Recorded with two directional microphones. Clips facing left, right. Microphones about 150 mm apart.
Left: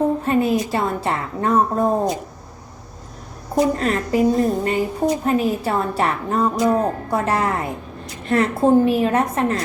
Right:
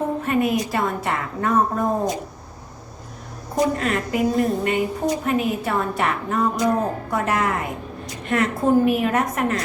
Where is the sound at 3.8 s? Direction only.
35° left (ahead or behind).